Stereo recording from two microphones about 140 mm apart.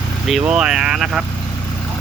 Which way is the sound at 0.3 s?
5° right (ahead or behind).